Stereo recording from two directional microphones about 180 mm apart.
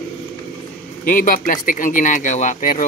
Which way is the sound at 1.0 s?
50° left (ahead or behind).